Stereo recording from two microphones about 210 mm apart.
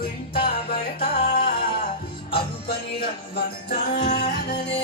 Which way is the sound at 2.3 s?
50° left (ahead or behind).